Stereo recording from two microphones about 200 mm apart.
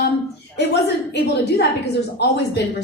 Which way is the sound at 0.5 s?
60° left (ahead or behind).